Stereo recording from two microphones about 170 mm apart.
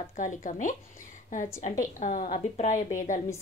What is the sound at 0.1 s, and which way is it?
A woman's voice, 50° left (ahead or behind).